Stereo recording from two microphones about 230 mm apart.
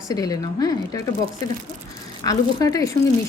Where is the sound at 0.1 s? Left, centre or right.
Centre.